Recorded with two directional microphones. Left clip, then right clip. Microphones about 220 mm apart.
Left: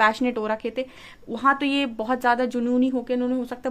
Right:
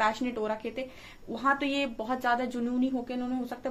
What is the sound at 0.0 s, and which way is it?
A woman's voice, 50° left (ahead or behind).